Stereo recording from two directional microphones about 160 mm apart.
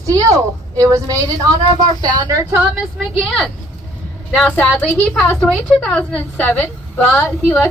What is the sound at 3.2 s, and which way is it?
A woman's voice, 5° left (ahead or behind).